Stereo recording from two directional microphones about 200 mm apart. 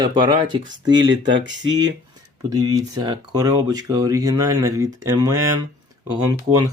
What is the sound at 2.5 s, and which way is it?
Speech, 20° right (ahead or behind).